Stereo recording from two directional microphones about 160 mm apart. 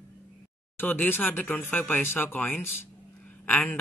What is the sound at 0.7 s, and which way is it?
Speech, 10° left (ahead or behind).